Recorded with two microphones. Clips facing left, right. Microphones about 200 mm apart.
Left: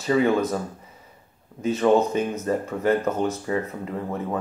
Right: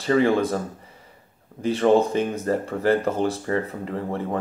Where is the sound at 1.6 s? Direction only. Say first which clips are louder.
Right 1 dB; 30° right (ahead or behind).